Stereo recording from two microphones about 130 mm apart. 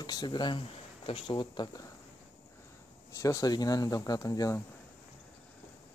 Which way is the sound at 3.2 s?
25° left (ahead or behind).